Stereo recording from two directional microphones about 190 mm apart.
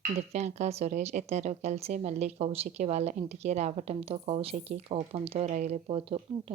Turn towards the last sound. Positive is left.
turn(degrees=-30)  # may be behind; listen again after turning